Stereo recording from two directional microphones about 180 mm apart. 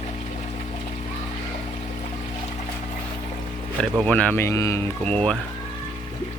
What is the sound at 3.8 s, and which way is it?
Speech, 5° left (ahead or behind).